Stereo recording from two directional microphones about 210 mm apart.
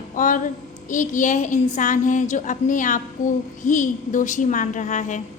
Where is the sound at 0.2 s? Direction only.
40° left (ahead or behind).